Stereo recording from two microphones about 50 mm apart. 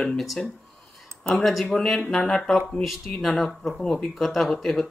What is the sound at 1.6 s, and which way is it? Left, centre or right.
Speech, centre.